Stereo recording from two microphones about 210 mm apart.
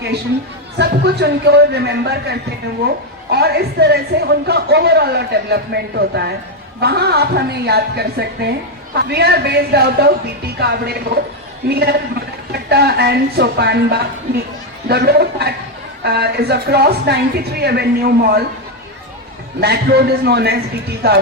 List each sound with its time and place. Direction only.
0.8 s speech: 50° right (ahead or behind)
19.5 s speech: 50° right (ahead or behind)